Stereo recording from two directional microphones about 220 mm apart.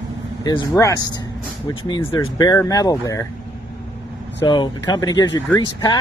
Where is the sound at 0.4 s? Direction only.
15° left (ahead or behind).